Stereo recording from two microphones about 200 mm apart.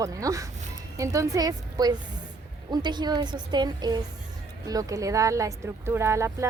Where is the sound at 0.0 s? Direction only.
15° right (ahead or behind).